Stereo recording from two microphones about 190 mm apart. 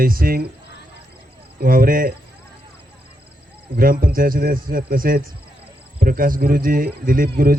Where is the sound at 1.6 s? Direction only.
50° right (ahead or behind).